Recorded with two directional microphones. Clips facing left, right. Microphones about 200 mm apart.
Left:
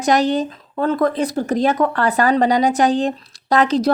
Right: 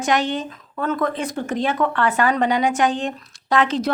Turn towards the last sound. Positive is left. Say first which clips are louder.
# left 4 dB
turn(degrees=40)  # may be behind; listen again after turning